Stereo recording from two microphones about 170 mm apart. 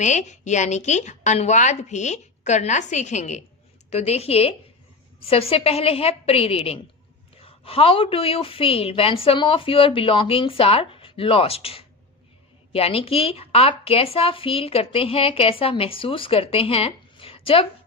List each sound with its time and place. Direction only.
0.0 s a woman's voice: 45° left (ahead or behind)